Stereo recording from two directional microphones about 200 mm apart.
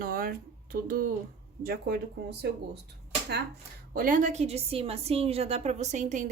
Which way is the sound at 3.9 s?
45° right (ahead or behind).